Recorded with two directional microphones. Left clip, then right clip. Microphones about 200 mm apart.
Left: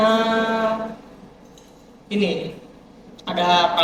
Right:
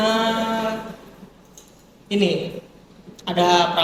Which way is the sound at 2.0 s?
40° right (ahead or behind).